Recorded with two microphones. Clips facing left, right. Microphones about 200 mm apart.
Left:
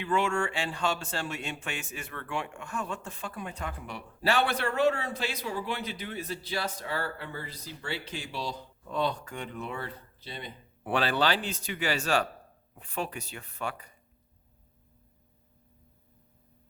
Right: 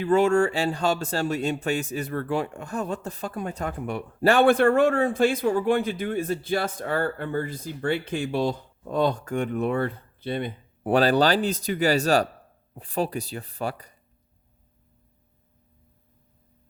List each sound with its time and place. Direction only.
0.0 s speech: 40° right (ahead or behind); by 10.5 s 55° right (ahead or behind)
10.8 s speech: 40° right (ahead or behind)